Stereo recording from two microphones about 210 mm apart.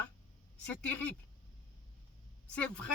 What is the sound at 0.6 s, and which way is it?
Speech, 5° left (ahead or behind).